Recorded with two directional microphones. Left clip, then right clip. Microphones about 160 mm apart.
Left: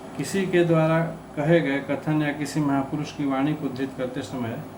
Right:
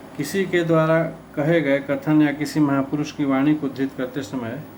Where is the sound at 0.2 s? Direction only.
65° right (ahead or behind).